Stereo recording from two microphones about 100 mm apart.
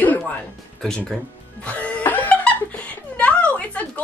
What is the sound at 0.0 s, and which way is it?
Music, 15° left (ahead or behind).